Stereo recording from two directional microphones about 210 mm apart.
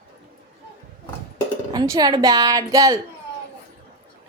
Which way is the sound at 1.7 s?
20° right (ahead or behind).